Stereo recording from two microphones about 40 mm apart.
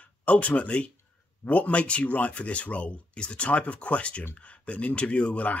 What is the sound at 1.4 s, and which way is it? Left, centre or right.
Speech, left.